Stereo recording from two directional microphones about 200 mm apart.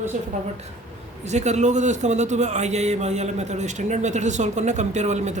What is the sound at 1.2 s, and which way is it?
A man's voice, 35° right (ahead or behind).